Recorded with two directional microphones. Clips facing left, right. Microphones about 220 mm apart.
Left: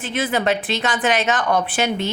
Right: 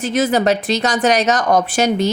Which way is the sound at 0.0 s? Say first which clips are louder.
Right 6 dB; 40° right (ahead or behind).